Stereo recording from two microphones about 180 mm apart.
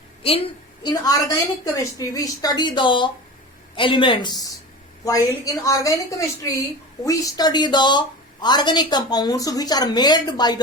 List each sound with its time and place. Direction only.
0.2 s a woman's voice: 30° left (ahead or behind)